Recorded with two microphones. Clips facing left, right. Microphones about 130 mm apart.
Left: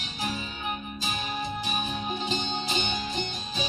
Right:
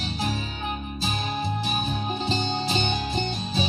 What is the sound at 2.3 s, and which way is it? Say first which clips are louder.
Music: right 4 dB; 40° right (ahead or behind).